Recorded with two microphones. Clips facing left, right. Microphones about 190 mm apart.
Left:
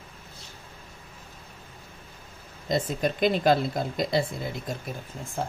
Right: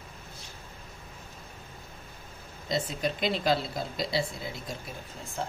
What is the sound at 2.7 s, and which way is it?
Speech, 50° left (ahead or behind).